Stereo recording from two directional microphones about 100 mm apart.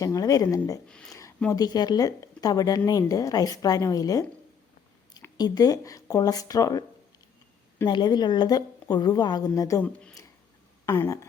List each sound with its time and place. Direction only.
0.0 s speech: 35° left (ahead or behind)
0.9 s a sound: 10° left (ahead or behind)
1.5 s speech: 40° left (ahead or behind)
5.4 s speech: 40° left (ahead or behind)
7.9 s a woman's voice: 45° left (ahead or behind)
9.8 s speech: 10° left (ahead or behind)
10.8 s a sound: 25° left (ahead or behind)